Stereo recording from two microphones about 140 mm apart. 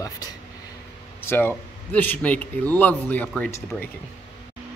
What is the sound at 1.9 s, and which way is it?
Speech, 10° left (ahead or behind).